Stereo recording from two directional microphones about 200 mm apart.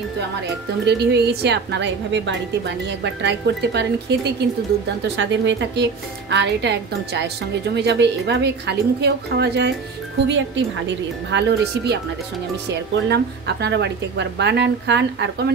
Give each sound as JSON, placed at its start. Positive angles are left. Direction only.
{"t": 0.8, "sound": "speech", "side_deg": -55}